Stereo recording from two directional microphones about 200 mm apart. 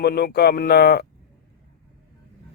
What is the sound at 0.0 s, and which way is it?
Speech, 50° left (ahead or behind).